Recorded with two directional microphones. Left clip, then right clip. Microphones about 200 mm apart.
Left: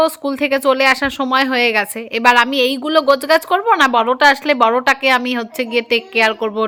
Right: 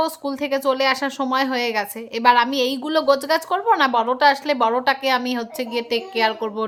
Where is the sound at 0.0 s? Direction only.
20° left (ahead or behind).